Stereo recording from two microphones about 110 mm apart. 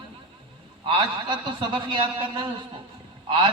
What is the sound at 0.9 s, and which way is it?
A man's voice, 45° right (ahead or behind).